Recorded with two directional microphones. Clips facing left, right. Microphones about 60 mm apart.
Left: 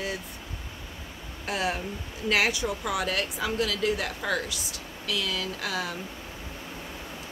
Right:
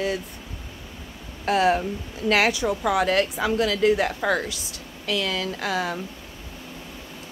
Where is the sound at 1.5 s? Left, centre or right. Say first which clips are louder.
Right 9 dB; right.